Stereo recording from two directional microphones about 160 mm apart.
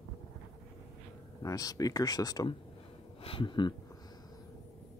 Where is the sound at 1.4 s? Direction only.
20° left (ahead or behind).